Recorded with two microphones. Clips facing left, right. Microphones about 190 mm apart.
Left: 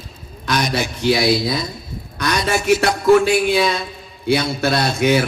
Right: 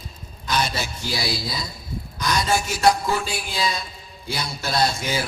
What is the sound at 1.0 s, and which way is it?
A man's voice, 70° left (ahead or behind).